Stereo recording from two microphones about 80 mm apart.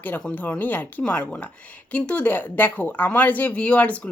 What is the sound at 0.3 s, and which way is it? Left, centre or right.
Speech, left.